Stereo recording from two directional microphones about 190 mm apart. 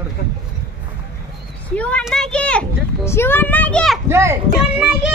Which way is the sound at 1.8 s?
5° left (ahead or behind).